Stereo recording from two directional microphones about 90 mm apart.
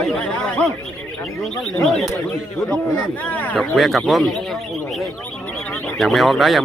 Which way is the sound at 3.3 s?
15° left (ahead or behind).